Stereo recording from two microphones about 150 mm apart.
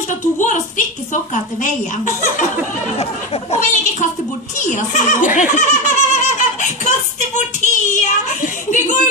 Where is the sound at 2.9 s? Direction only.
45° left (ahead or behind).